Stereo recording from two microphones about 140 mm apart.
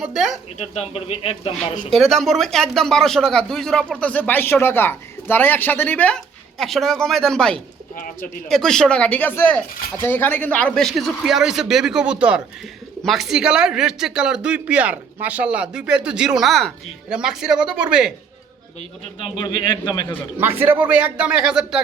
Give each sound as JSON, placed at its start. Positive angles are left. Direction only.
{"t": 0.0, "sound": "speech", "side_deg": 0}
{"t": 0.6, "sound": "speech", "side_deg": 50}
{"t": 1.9, "sound": "speech", "side_deg": 0}
{"t": 7.9, "sound": "speech", "side_deg": 75}
{"t": 8.4, "sound": "speech", "side_deg": 5}
{"t": 19.2, "sound": "a man's voice", "side_deg": 35}
{"t": 20.4, "sound": "a man's voice", "side_deg": -15}